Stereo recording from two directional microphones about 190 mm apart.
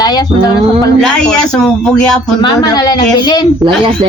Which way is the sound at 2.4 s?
20° left (ahead or behind).